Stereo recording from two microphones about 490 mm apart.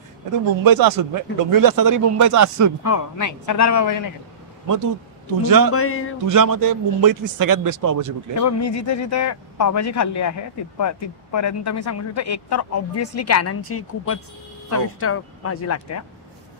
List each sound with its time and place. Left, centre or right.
0.7 s speech: right
2.8 s speech: left
5.4 s speech: right
5.7 s speech: left
6.2 s speech: right
8.4 s speech: left